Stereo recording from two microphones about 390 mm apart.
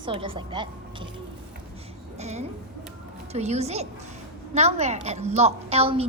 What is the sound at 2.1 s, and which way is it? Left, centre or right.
A woman's voice, centre.